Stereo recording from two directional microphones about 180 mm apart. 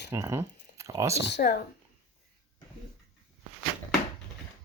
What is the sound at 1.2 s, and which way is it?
Speech, 70° left (ahead or behind).